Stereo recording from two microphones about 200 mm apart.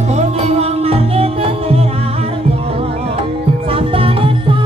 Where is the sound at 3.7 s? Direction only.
30° right (ahead or behind).